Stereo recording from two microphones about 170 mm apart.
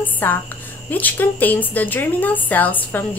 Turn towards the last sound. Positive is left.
turn(degrees=10)  # may be behind; listen again after turning